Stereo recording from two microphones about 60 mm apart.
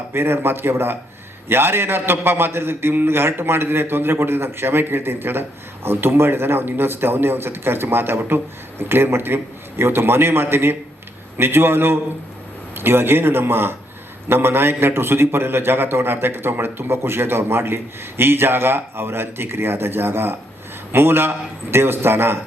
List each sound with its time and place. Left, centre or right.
0.1 s a man's voice: right